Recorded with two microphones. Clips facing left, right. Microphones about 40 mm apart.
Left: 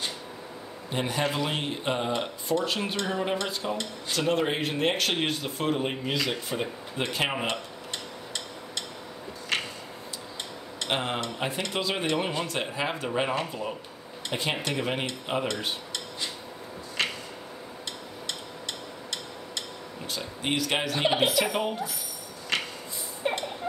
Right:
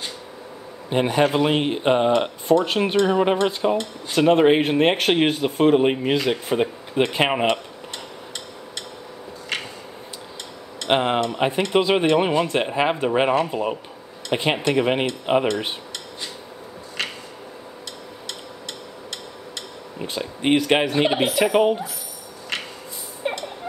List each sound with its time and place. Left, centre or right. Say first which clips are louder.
0.8 s speech: right 9 dB; right
10.9 s speech: right 10 dB; right
14.3 s cutlery: right 9 dB; right
19.5 s speech: right 1 dB; right
23.2 s a sound: right 2 dB; centre